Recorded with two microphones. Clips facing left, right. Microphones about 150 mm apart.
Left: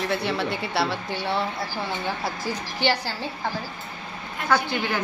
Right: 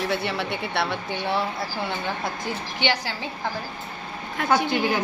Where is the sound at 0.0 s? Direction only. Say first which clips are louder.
Left 1 dB; centre (ahead or behind).